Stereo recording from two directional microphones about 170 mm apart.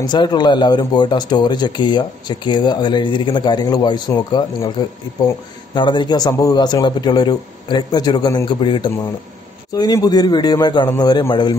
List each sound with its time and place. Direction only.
0.0 s speech: 25° left (ahead or behind)